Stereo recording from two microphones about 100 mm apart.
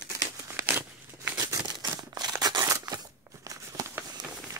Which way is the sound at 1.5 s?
40° right (ahead or behind).